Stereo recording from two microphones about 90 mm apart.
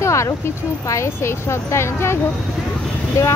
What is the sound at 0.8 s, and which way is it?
Speech, 35° left (ahead or behind).